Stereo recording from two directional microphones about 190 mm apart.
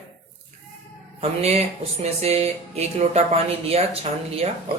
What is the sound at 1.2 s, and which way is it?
Speech, 35° right (ahead or behind).